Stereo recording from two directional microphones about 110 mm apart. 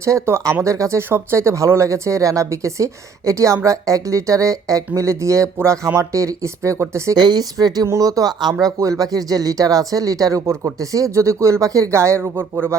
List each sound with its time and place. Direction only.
0.0 s speech: 25° right (ahead or behind)
7.2 s speech: 40° right (ahead or behind); by 12.7 s 20° right (ahead or behind)